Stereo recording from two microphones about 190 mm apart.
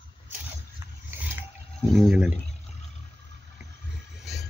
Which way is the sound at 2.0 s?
Centre (ahead or behind).